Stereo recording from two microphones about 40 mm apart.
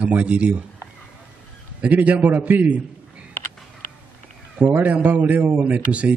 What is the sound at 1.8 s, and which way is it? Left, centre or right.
A man's voice, right.